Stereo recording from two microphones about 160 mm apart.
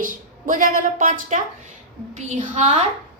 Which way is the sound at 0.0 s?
55° right (ahead or behind).